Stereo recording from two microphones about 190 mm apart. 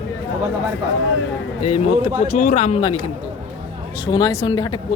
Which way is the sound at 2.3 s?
45° left (ahead or behind).